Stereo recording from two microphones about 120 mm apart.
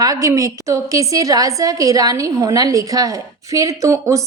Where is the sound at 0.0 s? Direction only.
30° right (ahead or behind).